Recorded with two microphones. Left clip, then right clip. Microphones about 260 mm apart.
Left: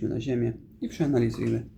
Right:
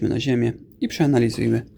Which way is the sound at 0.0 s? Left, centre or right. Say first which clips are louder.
Right 7 dB; right.